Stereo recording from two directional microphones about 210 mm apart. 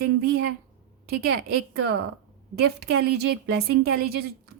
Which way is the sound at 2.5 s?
50° right (ahead or behind).